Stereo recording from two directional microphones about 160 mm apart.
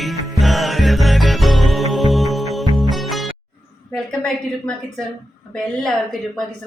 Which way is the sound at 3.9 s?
5° left (ahead or behind).